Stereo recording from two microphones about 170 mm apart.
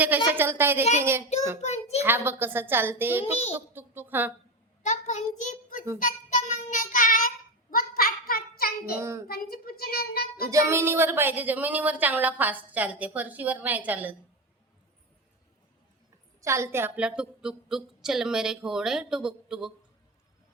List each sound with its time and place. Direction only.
0.3 s a woman's voice: 15° right (ahead or behind)
1.6 s a child's voice: 40° left (ahead or behind)
2.0 s a woman's voice: 10° right (ahead or behind)
4.8 s a child's voice: 45° left (ahead or behind)
6.0 s child singing: 50° left (ahead or behind)
9.0 s a woman's voice: 15° right (ahead or behind)
9.2 s a child's voice: 60° left (ahead or behind)
10.5 s a woman's voice: 15° right (ahead or behind)
16.4 s a woman's voice: 15° right (ahead or behind)